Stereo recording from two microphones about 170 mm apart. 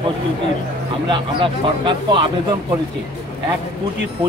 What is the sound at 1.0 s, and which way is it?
Speech, 30° right (ahead or behind).